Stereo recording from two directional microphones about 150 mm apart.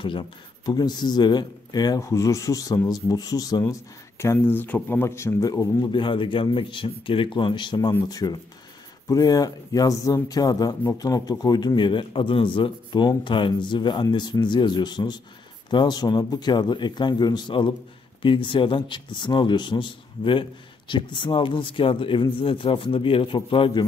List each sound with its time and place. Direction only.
0.7 s a man's voice: 25° left (ahead or behind)